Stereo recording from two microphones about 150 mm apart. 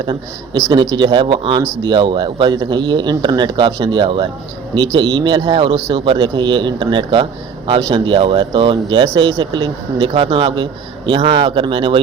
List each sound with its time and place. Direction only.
0.7 s speech: 30° right (ahead or behind)